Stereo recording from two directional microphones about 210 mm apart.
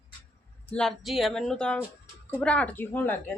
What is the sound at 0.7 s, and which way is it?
A woman's voice, 5° left (ahead or behind).